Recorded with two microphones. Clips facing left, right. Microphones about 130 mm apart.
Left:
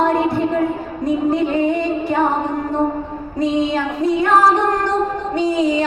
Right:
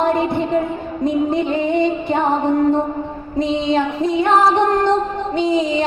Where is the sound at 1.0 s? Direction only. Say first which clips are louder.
Even; 20° right (ahead or behind).